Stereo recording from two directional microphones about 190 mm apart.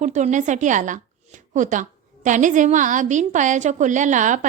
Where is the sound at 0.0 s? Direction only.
40° right (ahead or behind).